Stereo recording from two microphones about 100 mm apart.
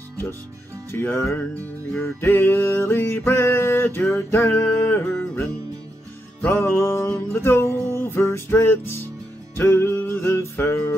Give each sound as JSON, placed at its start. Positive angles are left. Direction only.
{"t": 0.9, "sound": "music", "side_deg": 25}